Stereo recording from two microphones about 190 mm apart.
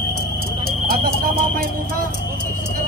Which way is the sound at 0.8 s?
50° right (ahead or behind).